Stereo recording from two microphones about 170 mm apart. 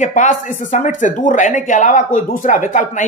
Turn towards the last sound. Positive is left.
turn(degrees=50)  # may be behind; listen again after turning